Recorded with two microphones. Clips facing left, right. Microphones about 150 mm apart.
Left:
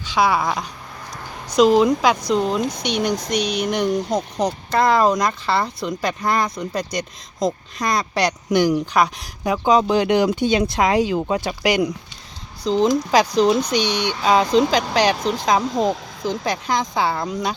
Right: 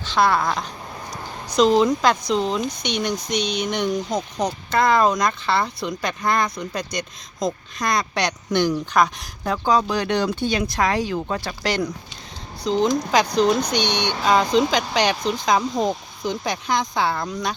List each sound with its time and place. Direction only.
0.1 s speech: 10° left (ahead or behind)
4.1 s speech: 30° left (ahead or behind)
4.7 s speech: 5° left (ahead or behind)
12.7 s speech: 5° left (ahead or behind)